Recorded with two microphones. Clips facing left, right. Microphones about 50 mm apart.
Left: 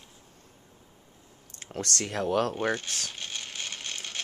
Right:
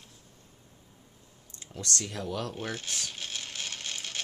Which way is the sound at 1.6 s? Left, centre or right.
Left.